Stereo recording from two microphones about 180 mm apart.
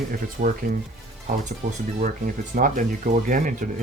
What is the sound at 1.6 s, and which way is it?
Speech, 45° right (ahead or behind).